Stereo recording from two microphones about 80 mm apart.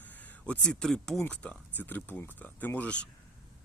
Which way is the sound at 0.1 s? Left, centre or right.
Left.